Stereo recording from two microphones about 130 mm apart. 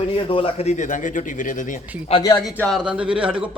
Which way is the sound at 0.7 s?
70° left (ahead or behind).